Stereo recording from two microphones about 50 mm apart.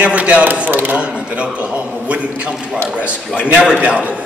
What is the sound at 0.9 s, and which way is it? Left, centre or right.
A man's voice, right.